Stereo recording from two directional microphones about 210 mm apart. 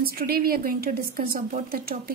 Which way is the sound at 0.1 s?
45° right (ahead or behind).